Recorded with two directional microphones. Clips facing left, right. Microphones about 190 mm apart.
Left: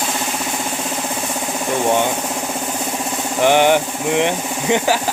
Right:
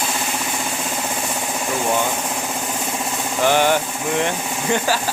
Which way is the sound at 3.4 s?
20° left (ahead or behind).